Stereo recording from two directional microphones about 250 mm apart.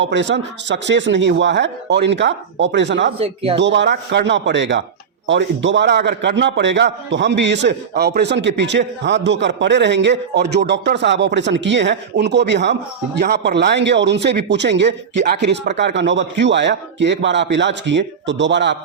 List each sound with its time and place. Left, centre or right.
0.0 s a man's voice: right
3.2 s speech: right
3.6 s a man's voice: right